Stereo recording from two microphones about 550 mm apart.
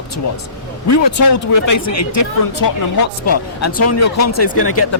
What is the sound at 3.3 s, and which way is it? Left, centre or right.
Speech, left.